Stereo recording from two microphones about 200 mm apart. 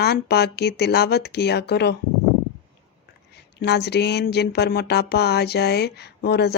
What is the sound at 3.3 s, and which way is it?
Speech, 55° left (ahead or behind).